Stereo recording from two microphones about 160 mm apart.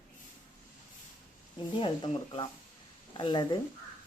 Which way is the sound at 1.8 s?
30° left (ahead or behind).